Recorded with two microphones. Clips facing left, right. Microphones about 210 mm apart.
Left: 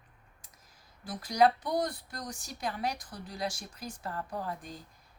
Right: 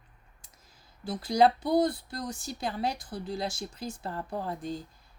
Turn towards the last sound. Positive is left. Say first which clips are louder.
# right 5 dB
turn(degrees=-25)  # may be behind; listen again after turning